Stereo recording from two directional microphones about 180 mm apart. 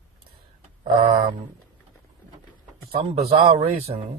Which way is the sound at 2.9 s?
35° right (ahead or behind).